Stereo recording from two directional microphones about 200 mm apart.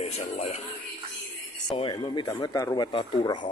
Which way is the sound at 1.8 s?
25° left (ahead or behind).